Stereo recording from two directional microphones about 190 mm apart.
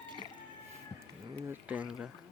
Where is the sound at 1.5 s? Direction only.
10° right (ahead or behind).